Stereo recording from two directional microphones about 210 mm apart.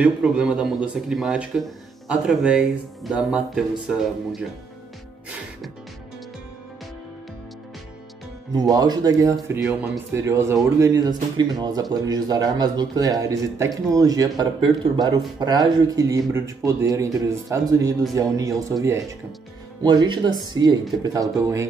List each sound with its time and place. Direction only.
0.0 s a man's voice: 5° right (ahead or behind)
8.5 s speech: 20° right (ahead or behind)